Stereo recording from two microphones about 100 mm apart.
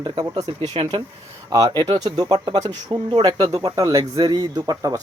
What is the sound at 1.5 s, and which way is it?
Speech, 40° right (ahead or behind).